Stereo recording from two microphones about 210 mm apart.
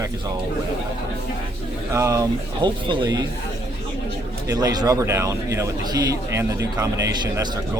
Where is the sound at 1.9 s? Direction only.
15° right (ahead or behind).